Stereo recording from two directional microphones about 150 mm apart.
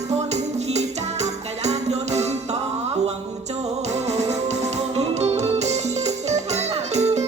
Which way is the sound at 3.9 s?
45° right (ahead or behind).